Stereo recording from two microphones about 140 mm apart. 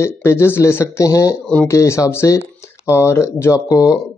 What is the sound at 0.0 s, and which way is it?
A man's voice, 20° left (ahead or behind).